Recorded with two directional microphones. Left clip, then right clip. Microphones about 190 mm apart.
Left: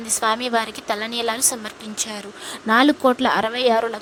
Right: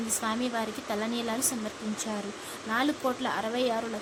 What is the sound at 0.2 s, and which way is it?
Speech, 55° left (ahead or behind).